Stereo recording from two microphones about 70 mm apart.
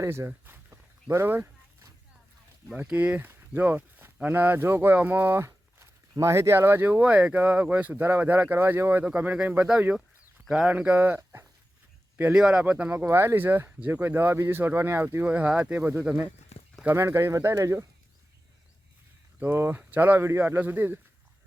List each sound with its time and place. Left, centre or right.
0.0 s speech: right
2.7 s speech: right
5.5 s speech: right
7.0 s speech: centre
7.3 s speech: right
11.2 s speech: right
12.3 s speech: centre
13.1 s speech: right
15.3 s speech: centre; by 17.8 s right
19.4 s speech: right